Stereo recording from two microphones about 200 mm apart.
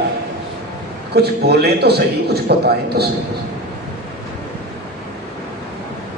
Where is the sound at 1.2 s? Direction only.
55° right (ahead or behind).